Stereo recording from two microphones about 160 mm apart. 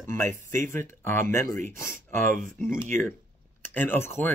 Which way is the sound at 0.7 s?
15° left (ahead or behind).